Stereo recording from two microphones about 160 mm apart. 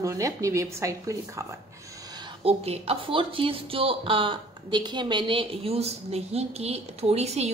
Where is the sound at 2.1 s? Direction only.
25° right (ahead or behind).